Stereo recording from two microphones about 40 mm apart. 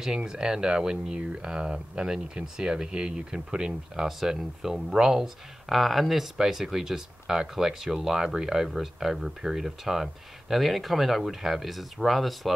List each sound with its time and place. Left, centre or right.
0.0 s speech: centre